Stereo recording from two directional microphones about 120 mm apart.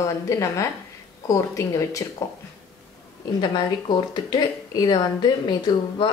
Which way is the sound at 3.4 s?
40° left (ahead or behind).